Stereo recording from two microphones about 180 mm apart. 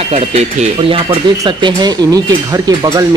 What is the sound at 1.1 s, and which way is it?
Speech, 25° right (ahead or behind).